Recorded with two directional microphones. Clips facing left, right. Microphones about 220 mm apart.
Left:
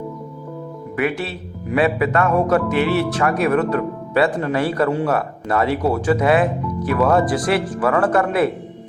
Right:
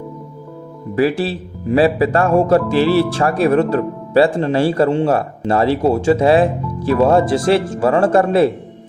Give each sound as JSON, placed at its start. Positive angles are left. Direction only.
{"t": 0.9, "sound": "speech", "side_deg": -30}